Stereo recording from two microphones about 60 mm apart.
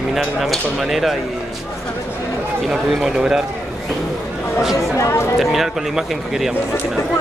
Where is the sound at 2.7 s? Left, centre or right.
Centre.